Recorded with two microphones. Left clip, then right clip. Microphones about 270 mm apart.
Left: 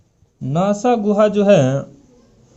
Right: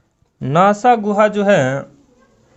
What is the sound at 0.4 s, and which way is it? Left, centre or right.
A man's voice, right.